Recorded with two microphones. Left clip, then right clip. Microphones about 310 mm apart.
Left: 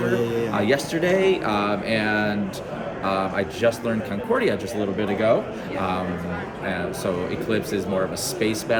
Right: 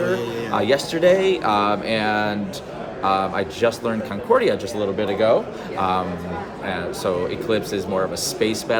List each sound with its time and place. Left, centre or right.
0.5 s a man's voice: centre
6.7 s a man's voice: centre